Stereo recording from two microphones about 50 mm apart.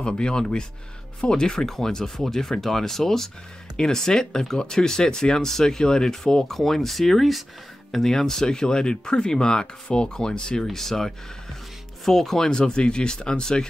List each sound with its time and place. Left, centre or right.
0.0 s speech: centre